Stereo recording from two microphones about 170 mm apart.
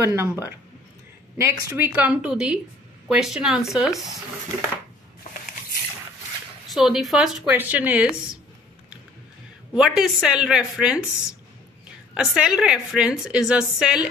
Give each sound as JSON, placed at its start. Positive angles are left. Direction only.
{"t": 0.0, "sound": "a woman's voice", "side_deg": -15}
{"t": 6.7, "sound": "a woman's voice", "side_deg": 0}
{"t": 9.8, "sound": "a woman's voice", "side_deg": -5}
{"t": 12.1, "sound": "a woman's voice", "side_deg": -5}